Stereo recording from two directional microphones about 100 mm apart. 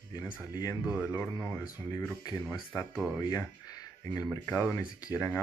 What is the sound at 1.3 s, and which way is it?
Speech, 15° left (ahead or behind).